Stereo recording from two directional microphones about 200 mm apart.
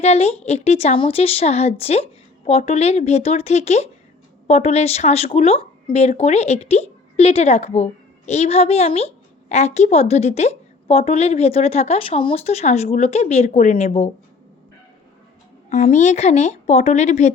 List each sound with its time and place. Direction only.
0.0 s a woman's voice: 30° left (ahead or behind)
15.7 s a woman's voice: 35° left (ahead or behind)